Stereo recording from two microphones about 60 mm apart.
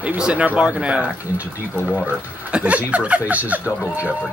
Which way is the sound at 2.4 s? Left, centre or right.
Right.